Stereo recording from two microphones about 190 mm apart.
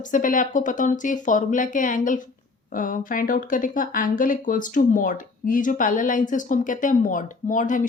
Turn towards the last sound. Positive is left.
turn(degrees=45)  # may be behind; listen again after turning